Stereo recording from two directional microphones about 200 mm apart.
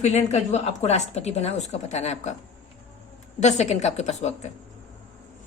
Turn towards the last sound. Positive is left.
turn(degrees=35)  # may be behind; listen again after turning